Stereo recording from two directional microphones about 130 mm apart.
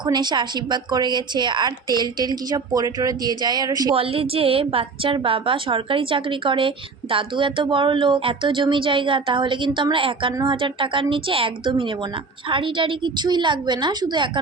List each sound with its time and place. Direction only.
0.0 s a woman's voice: 35° right (ahead or behind)
3.9 s a woman's voice: 45° right (ahead or behind)